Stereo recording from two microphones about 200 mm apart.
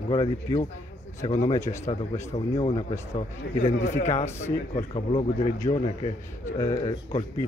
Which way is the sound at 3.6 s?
35° left (ahead or behind).